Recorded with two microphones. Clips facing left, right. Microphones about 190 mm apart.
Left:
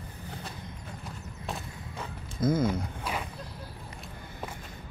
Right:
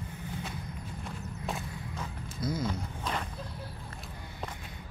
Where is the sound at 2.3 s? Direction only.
50° left (ahead or behind).